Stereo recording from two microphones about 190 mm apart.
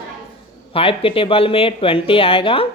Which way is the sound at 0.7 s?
30° left (ahead or behind).